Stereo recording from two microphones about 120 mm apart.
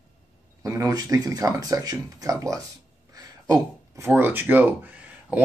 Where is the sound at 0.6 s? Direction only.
25° right (ahead or behind).